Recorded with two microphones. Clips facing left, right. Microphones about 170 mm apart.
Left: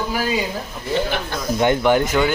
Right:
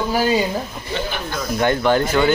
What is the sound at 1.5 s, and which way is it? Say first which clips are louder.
Speech: left 1 dB; 15° left (ahead or behind).